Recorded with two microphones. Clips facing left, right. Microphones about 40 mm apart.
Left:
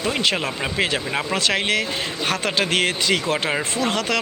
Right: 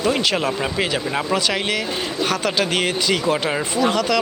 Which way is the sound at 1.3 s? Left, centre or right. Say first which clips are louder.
Left 1 dB; left.